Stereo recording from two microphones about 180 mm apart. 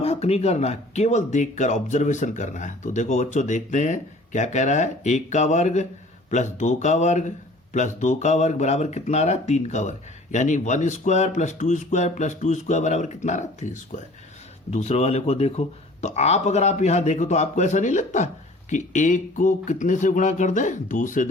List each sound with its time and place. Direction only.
0.0 s speech: 35° left (ahead or behind)